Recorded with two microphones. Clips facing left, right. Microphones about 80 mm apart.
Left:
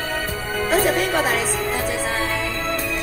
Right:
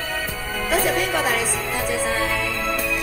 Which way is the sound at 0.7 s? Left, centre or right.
Left.